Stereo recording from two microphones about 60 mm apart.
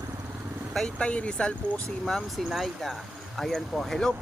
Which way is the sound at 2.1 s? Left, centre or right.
Centre.